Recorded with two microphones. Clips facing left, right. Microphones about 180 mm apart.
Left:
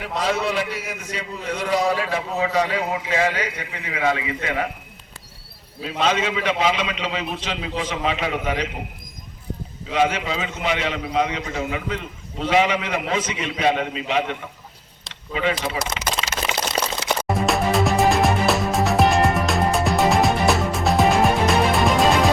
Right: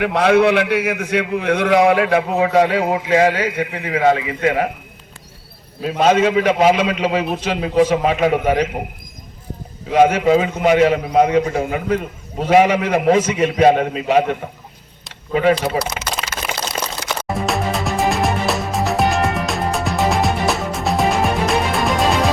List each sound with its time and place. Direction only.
0.0 s a man's voice: 65° right (ahead or behind)
2.9 s a man's voice: 45° right (ahead or behind)
5.8 s a man's voice: 50° right (ahead or behind)
9.9 s a man's voice: 50° right (ahead or behind)
16.8 s crack: 35° left (ahead or behind)
17.2 s music: centre (ahead or behind)